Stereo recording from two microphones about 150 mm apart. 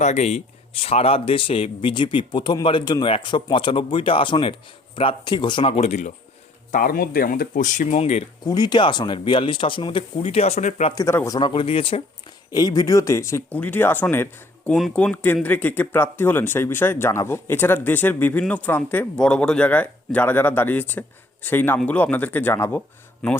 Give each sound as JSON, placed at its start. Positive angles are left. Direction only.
{"t": 0.0, "sound": "speech", "side_deg": 50}
{"t": 6.7, "sound": "speech", "side_deg": 70}
{"t": 8.4, "sound": "speech", "side_deg": 30}
{"t": 10.9, "sound": "speech", "side_deg": 20}
{"t": 11.3, "sound": "speech", "side_deg": 35}
{"t": 12.5, "sound": "speech", "side_deg": 25}
{"t": 14.7, "sound": "speech", "side_deg": 0}
{"t": 23.2, "sound": "speech", "side_deg": 5}